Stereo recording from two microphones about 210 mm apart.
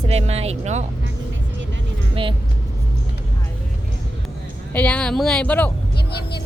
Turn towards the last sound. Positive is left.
turn(degrees=50)  # may be behind; listen again after turning